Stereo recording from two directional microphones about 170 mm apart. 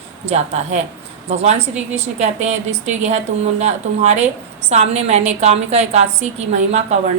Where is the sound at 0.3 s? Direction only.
40° right (ahead or behind).